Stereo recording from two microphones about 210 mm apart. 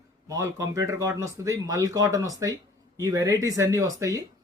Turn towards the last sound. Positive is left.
turn(degrees=-15)  # may be behind; listen again after turning